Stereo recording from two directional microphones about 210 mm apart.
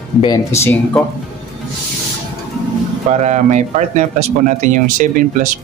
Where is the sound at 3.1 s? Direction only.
30° right (ahead or behind).